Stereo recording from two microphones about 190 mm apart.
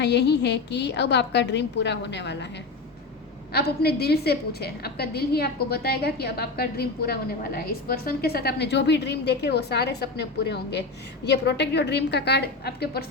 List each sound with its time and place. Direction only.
0.0 s a woman's voice: 65° left (ahead or behind)
3.5 s a woman's voice: 55° left (ahead or behind)